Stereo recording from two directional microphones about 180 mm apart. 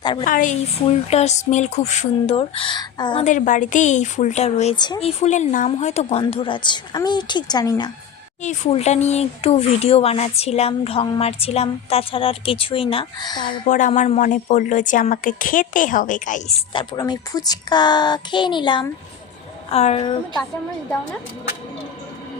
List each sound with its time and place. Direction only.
0.0 s speech: 25° left (ahead or behind)
0.3 s speech: 45° left (ahead or behind); by 3.2 s 25° left (ahead or behind)
3.2 s a woman's voice: 45° left (ahead or behind); by 7.9 s 20° left (ahead or behind)
8.4 s speech: 35° left (ahead or behind)
13.7 s a woman's voice: 45° left (ahead or behind)
16.7 s a woman's voice: 25° left (ahead or behind)